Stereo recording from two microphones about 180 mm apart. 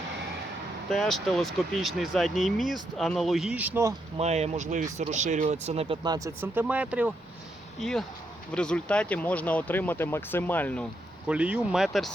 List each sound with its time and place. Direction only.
0.9 s speech: centre (ahead or behind)
4.2 s speech: 35° right (ahead or behind)
6.0 s speech: 20° right (ahead or behind)
7.8 s speech: centre (ahead or behind)
11.3 s speech: 5° right (ahead or behind)